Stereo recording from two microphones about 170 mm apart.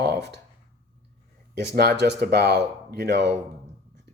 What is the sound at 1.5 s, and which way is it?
Speech, 75° right (ahead or behind).